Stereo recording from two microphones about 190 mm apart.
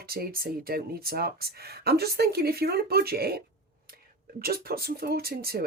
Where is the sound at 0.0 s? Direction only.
50° right (ahead or behind).